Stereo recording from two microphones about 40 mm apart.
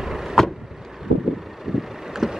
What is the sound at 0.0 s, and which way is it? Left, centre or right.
Vehicle, centre.